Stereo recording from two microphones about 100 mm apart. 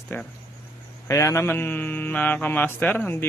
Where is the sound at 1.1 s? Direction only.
30° left (ahead or behind).